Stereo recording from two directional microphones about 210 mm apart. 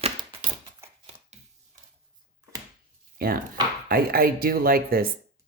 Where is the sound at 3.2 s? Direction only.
45° right (ahead or behind).